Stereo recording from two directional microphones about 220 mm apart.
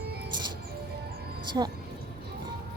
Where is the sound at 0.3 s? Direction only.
20° right (ahead or behind).